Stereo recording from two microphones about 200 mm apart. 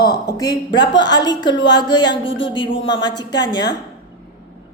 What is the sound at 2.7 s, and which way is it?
Speech, 65° left (ahead or behind).